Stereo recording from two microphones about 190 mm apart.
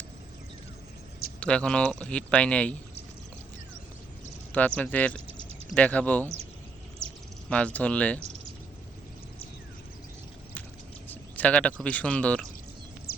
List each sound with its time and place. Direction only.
1.4 s speech: 5° left (ahead or behind)
4.5 s speech: 10° left (ahead or behind)
7.5 s speech: 5° left (ahead or behind)
11.1 s speech: 10° left (ahead or behind)
13.1 s bird: 55° left (ahead or behind)